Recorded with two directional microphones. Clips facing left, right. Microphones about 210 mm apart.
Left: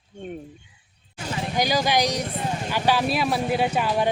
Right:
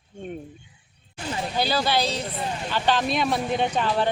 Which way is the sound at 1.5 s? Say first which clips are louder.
Left 2 dB; 15° left (ahead or behind).